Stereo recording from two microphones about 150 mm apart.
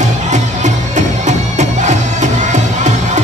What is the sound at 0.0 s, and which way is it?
Music, 50° right (ahead or behind).